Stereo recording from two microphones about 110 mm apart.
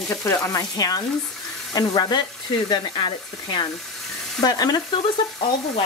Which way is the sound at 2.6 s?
40° left (ahead or behind).